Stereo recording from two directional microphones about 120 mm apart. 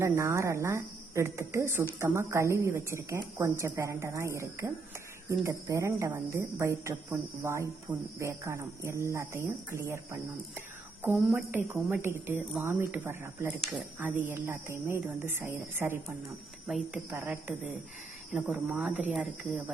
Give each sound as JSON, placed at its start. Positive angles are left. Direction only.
{"t": 0.0, "sound": "a woman's voice", "side_deg": -25}
{"t": 7.9, "sound": "speech", "side_deg": -5}
{"t": 8.2, "sound": "a woman's voice", "side_deg": -25}
{"t": 11.3, "sound": "speech", "side_deg": -10}